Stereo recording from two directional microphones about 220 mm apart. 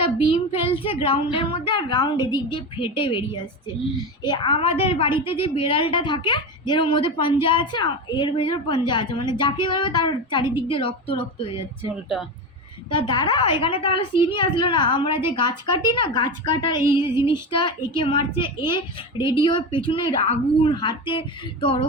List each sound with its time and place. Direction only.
0.0 s a woman's voice: 25° left (ahead or behind)
4.2 s a woman's voice: 20° left (ahead or behind)
12.9 s a woman's voice: 20° left (ahead or behind)